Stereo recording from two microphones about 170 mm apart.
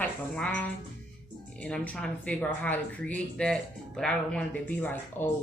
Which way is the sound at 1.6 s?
5° left (ahead or behind).